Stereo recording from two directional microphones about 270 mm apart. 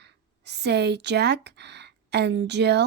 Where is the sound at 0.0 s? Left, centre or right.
Right.